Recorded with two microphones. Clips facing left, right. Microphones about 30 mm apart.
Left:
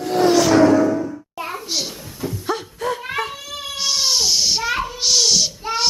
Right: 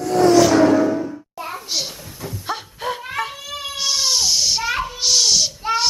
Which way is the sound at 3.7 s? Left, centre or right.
Centre.